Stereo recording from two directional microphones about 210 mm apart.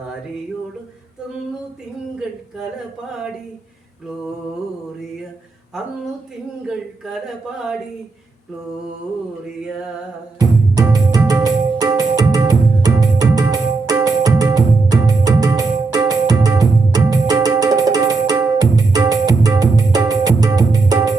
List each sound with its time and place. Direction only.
6.6 s speech: 5° right (ahead or behind)
10.3 s music: 15° right (ahead or behind)